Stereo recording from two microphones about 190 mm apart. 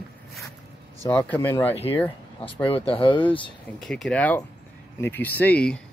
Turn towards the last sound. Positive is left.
turn(degrees=5)  # may be behind; listen again after turning